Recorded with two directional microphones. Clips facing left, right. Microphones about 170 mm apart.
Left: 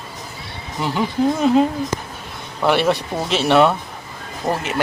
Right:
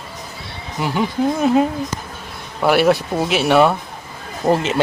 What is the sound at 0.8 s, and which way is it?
Speech, 5° right (ahead or behind).